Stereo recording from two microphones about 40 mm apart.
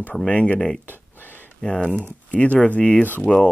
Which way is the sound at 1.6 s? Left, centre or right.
Centre.